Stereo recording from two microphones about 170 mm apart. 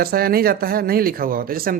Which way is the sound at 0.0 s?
60° right (ahead or behind).